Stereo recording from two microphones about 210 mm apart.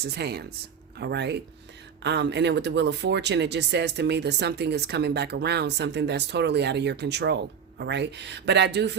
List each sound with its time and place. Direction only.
0.1 s speech: 50° right (ahead or behind)